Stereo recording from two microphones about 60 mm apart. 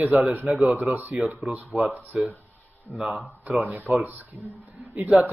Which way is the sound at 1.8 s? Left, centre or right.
Right.